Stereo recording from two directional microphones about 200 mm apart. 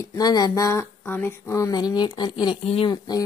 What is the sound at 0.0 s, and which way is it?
Speech, 15° left (ahead or behind).